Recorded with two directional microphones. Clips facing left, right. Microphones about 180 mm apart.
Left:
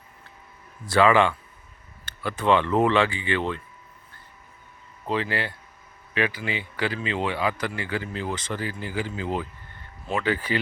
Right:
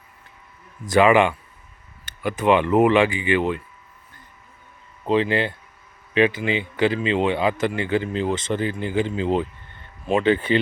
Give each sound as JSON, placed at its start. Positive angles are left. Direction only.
{"t": 0.9, "sound": "speech", "side_deg": -15}
{"t": 5.0, "sound": "speech", "side_deg": -20}